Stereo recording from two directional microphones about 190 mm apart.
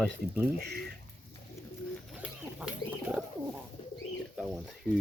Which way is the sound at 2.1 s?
5° right (ahead or behind).